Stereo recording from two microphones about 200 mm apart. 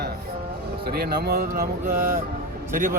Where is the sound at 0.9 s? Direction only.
50° right (ahead or behind).